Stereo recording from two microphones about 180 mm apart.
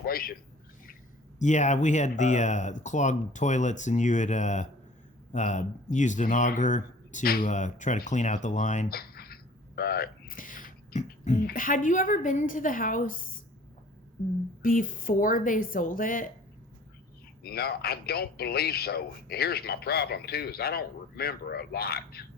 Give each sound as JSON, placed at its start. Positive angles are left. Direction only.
{"t": 0.0, "sound": "a man's voice", "side_deg": 55}
{"t": 1.4, "sound": "speech", "side_deg": 40}
{"t": 8.9, "sound": "a sound", "side_deg": 60}
{"t": 11.4, "sound": "speech", "side_deg": 50}
{"t": 14.6, "sound": "speech", "side_deg": 50}
{"t": 17.4, "sound": "speech", "side_deg": 60}